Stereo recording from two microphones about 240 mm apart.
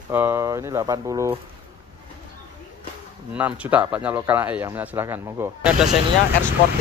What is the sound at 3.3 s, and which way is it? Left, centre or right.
Speech, centre.